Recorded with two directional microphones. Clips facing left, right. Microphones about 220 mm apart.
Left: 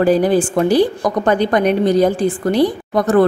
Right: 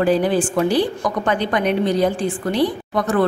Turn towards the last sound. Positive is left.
turn(degrees=40)  # may be behind; listen again after turning